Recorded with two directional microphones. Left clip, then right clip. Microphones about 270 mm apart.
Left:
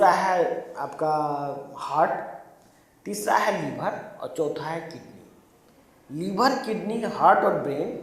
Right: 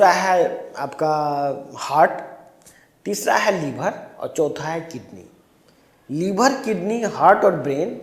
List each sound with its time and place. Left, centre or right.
0.0 s a man's voice: right
6.1 s speech: right